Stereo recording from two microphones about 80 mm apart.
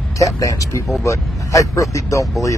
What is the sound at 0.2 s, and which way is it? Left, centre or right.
Speech, left.